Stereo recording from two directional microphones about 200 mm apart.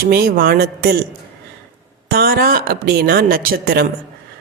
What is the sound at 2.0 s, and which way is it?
Speech, 50° right (ahead or behind).